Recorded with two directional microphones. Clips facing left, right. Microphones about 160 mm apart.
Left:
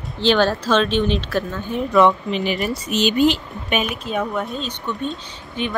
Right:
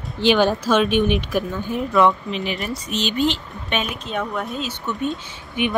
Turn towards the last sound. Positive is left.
turn(degrees=-10)  # may be behind; listen again after turning